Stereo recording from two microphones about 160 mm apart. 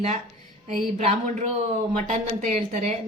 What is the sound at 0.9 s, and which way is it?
A woman's voice, 50° right (ahead or behind).